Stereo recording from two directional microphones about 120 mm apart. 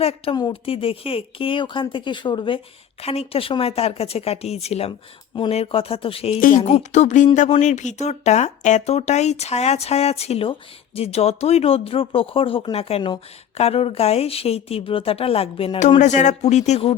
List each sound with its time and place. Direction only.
0.0 s speech: 55° left (ahead or behind); by 2.6 s 40° left (ahead or behind)
3.0 s speech: 55° left (ahead or behind)
6.6 s speech: 65° left (ahead or behind)
16.0 s speech: 80° left